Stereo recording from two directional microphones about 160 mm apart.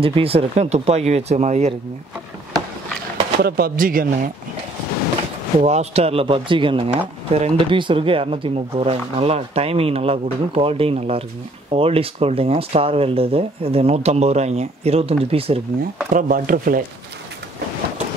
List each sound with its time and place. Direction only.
0.0 s speech: 35° right (ahead or behind)
3.4 s speech: 70° right (ahead or behind)
5.6 s speech: 45° right (ahead or behind)
16.1 s speech: 60° right (ahead or behind)